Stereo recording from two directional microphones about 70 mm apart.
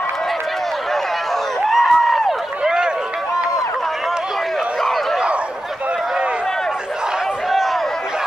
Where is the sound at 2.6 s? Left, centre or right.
Centre.